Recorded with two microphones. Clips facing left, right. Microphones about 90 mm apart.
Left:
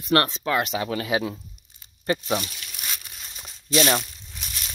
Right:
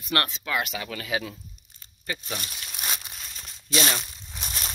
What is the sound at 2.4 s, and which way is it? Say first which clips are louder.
Snake: right 1 dB; 35° right (ahead or behind).